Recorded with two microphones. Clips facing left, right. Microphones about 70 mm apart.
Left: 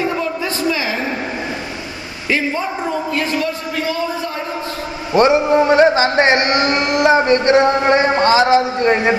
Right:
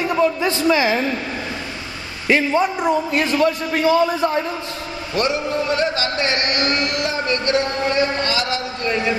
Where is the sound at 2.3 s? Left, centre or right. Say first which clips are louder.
Right 2 dB; right.